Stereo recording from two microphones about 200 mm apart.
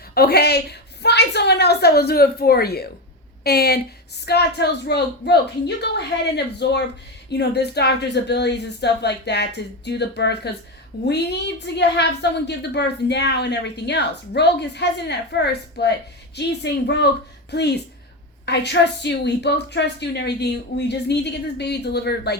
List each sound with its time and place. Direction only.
0.1 s a woman's voice: 50° left (ahead or behind)